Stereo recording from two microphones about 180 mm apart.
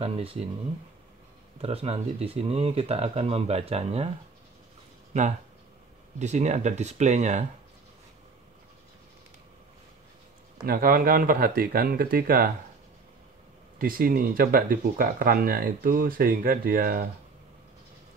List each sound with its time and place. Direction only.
0.0 s speech: 30° right (ahead or behind)
1.6 s speech: 35° right (ahead or behind)
6.1 s speech: 40° right (ahead or behind)
10.6 s speech: 55° right (ahead or behind)
13.7 s speech: 55° right (ahead or behind)